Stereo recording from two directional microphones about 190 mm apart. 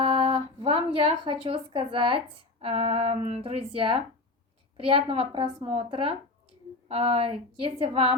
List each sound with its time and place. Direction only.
0.0 s a woman's voice: 30° right (ahead or behind)